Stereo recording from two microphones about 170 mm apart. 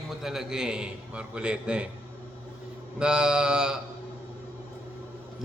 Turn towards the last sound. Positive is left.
turn(degrees=-5)  # may be behind; listen again after turning